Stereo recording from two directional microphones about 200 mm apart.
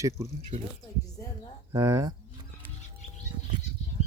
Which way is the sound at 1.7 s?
15° right (ahead or behind).